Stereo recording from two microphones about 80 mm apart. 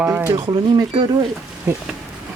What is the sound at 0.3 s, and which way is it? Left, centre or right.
Speech, right.